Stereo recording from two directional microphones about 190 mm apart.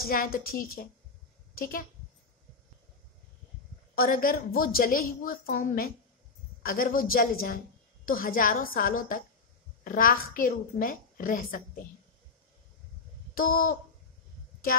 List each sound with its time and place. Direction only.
0.0 s a woman's voice: 50° left (ahead or behind)
3.9 s a woman's voice: 50° left (ahead or behind)
13.3 s a sound: 50° left (ahead or behind)